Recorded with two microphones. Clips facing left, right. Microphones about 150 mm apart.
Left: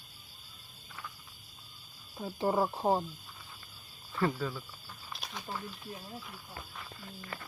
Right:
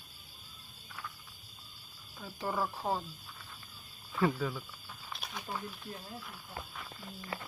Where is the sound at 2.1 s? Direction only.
30° left (ahead or behind).